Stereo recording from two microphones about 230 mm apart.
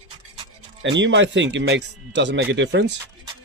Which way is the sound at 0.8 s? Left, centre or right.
Right.